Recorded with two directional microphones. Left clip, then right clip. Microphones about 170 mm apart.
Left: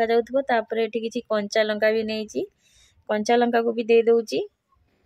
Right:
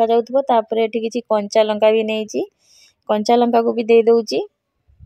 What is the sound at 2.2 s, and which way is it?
Speech, 20° right (ahead or behind).